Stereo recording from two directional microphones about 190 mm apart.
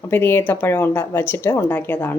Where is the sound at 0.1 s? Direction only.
10° left (ahead or behind).